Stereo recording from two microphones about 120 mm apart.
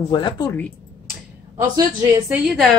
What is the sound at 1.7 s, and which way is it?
Speech, 25° right (ahead or behind).